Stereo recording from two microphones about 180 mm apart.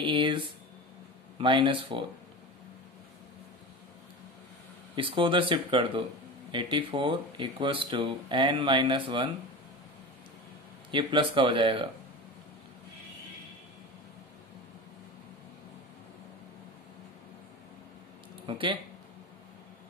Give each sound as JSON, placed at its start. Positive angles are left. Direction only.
{"t": 0.0, "sound": "speech", "side_deg": -25}
{"t": 4.9, "sound": "speech", "side_deg": -30}
{"t": 10.9, "sound": "speech", "side_deg": -25}
{"t": 18.5, "sound": "speech", "side_deg": -25}